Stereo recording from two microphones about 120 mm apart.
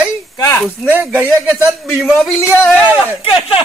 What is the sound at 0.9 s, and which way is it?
A man's voice, 15° right (ahead or behind).